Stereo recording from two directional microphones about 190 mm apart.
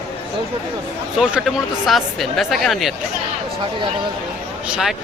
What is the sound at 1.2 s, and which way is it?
Speech, centre (ahead or behind).